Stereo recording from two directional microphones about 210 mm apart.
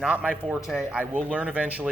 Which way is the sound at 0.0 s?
5° right (ahead or behind).